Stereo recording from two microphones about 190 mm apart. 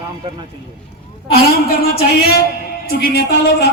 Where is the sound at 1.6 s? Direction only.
55° left (ahead or behind).